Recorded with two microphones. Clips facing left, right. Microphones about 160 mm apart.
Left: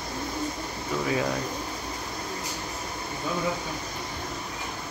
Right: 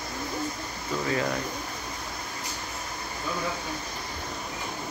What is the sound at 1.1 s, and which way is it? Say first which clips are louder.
Speech: left 1 dB; 10° left (ahead or behind).